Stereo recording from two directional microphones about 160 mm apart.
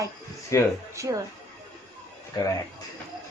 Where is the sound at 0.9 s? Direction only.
20° right (ahead or behind).